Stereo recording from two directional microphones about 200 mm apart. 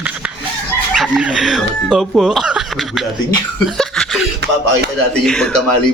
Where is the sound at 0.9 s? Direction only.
5° right (ahead or behind).